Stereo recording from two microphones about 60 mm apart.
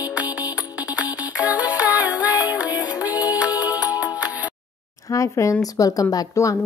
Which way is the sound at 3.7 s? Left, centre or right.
Left.